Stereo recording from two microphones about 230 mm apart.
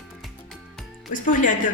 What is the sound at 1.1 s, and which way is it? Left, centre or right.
Speech, left.